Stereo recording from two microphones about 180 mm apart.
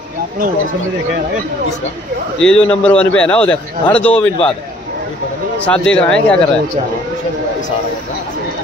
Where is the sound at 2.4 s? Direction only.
5° left (ahead or behind).